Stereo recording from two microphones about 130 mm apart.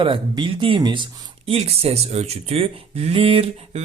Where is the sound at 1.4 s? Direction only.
50° right (ahead or behind).